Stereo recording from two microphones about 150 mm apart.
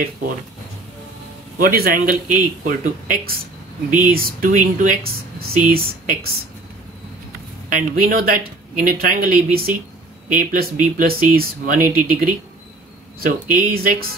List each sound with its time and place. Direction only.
1.6 s speech: 80° right
7.7 s speech: 70° right (ahead or behind)
13.2 s speech: 75° right (ahead or behind)